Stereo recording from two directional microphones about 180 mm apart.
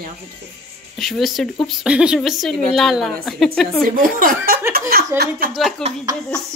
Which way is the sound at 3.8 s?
50° right (ahead or behind).